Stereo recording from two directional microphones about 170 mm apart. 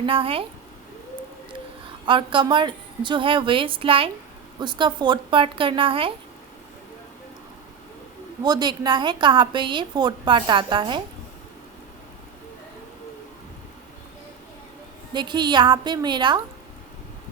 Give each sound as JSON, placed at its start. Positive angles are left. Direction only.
{"t": 0.0, "sound": "speech", "side_deg": -30}
{"t": 2.0, "sound": "a woman's voice", "side_deg": -30}
{"t": 8.4, "sound": "a woman's voice", "side_deg": -25}
{"t": 15.1, "sound": "a woman's voice", "side_deg": -25}